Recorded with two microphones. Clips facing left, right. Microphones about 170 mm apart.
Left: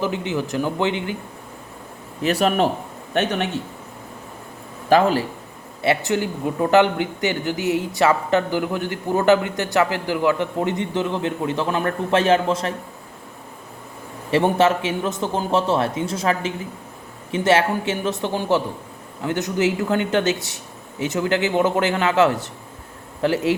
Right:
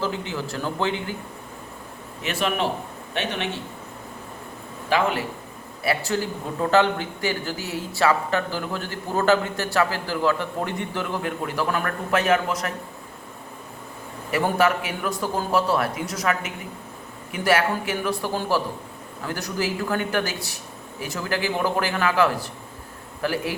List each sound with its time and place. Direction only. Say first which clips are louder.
0.0 s speech: left 4 dB; 20° left (ahead or behind)
2.2 s a man's voice: left 6 dB; 40° left (ahead or behind)
4.9 s speech: left 6 dB; 35° left (ahead or behind)
5.8 s speech: left 4 dB; 20° left (ahead or behind)
14.3 s speech: left 4 dB; 25° left (ahead or behind)